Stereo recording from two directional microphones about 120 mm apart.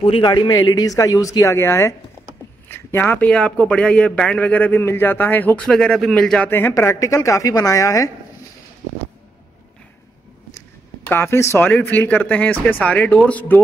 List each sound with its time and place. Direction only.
0.0 s speech: 45° left (ahead or behind); by 6.5 s 5° left (ahead or behind)
6.5 s a woman's voice: 20° left (ahead or behind)
11.1 s speech: 20° left (ahead or behind)